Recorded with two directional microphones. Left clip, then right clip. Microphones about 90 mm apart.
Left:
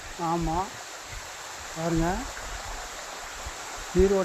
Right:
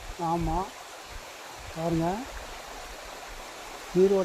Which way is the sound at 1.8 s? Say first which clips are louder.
Left 1 dB; 15° left (ahead or behind).